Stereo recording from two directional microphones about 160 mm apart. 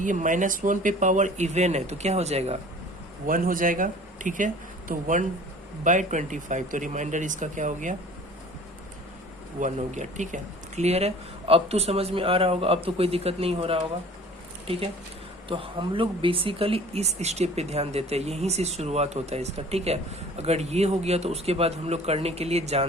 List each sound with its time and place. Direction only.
0.0 s speech: 55° right (ahead or behind)
3.2 s speech: 60° right (ahead or behind)
9.6 s speech: 50° right (ahead or behind)
15.4 s speech: 35° right (ahead or behind)